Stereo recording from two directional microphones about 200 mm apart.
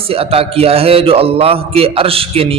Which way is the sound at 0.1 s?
30° right (ahead or behind).